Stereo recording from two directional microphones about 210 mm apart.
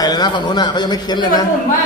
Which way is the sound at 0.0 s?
20° left (ahead or behind).